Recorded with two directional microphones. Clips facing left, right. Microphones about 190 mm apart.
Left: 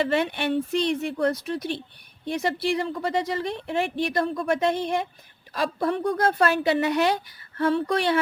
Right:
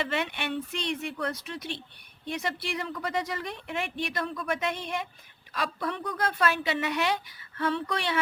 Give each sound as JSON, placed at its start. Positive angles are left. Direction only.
{"t": 0.0, "sound": "speech", "side_deg": 35}
{"t": 5.5, "sound": "speech", "side_deg": 45}